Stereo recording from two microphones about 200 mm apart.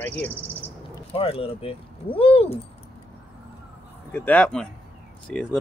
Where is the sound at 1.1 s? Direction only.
30° left (ahead or behind).